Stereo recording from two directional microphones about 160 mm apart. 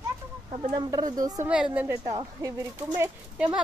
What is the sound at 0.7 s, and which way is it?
Speech, 25° right (ahead or behind).